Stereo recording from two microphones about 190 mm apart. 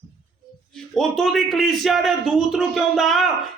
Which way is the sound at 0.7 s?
Centre (ahead or behind).